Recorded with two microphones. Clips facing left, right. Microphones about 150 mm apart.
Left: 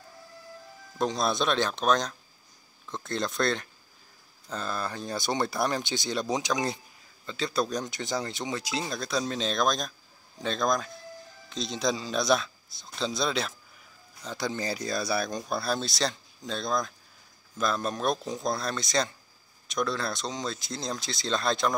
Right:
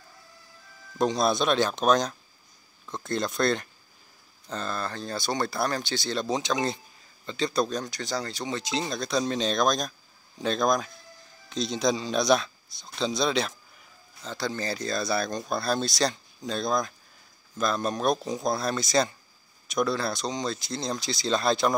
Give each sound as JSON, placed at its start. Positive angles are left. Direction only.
{"t": 0.9, "sound": "speech", "side_deg": 0}
{"t": 7.2, "sound": "speech", "side_deg": 0}
{"t": 7.7, "sound": "speech", "side_deg": 20}
{"t": 8.5, "sound": "speech", "side_deg": 5}
{"t": 14.2, "sound": "speech", "side_deg": 15}